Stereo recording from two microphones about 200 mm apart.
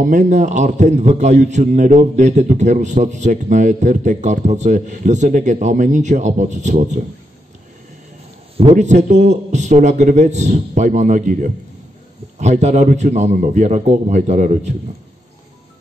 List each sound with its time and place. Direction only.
0.0 s a man's voice: 40° right (ahead or behind)
8.5 s a man's voice: 35° right (ahead or behind)